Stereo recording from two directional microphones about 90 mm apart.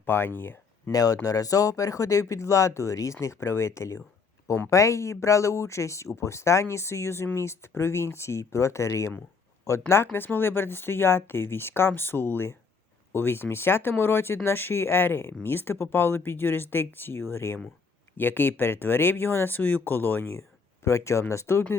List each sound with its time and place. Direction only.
0.0 s speech: 25° left (ahead or behind)
0.9 s speech: 40° left (ahead or behind); by 20.4 s 25° left (ahead or behind)
20.8 s speech: 35° left (ahead or behind)